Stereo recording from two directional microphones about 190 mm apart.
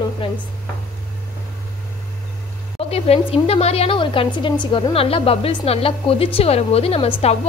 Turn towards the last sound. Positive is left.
turn(degrees=30)  # may be behind; listen again after turning